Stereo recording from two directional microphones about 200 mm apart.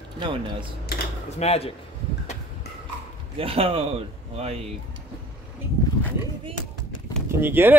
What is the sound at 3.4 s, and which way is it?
Speech, 30° right (ahead or behind).